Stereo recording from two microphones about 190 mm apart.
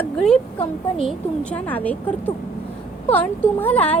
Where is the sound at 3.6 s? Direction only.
10° left (ahead or behind).